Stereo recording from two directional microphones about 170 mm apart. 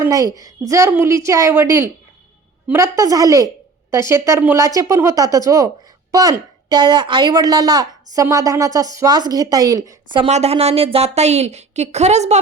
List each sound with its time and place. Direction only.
0.0 s a woman's voice: 20° right (ahead or behind); by 12.4 s 40° right (ahead or behind)